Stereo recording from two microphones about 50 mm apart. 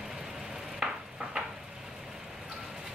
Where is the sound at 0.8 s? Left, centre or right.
Centre.